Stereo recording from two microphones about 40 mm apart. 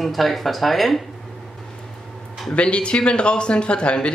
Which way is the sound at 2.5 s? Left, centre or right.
Left.